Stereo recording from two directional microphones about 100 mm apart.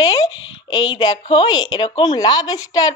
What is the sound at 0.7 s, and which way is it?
A woman's voice, 45° left (ahead or behind).